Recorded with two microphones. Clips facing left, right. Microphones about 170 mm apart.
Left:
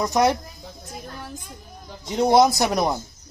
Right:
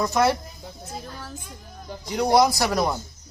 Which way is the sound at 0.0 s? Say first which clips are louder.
Left 1 dB; 15° left (ahead or behind).